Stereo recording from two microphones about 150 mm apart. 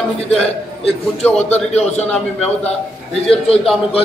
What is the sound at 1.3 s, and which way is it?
Speech, 45° left (ahead or behind).